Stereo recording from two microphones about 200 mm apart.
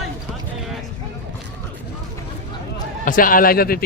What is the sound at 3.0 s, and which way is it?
Speech, 45° left (ahead or behind).